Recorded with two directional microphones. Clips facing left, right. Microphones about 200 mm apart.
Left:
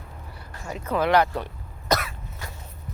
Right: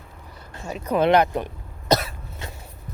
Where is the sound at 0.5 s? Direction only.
20° right (ahead or behind).